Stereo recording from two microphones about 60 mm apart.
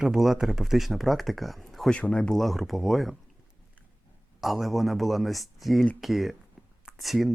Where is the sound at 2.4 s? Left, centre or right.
Centre.